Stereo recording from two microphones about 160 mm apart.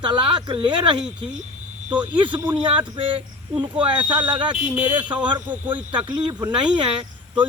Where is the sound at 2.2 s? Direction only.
30° right (ahead or behind).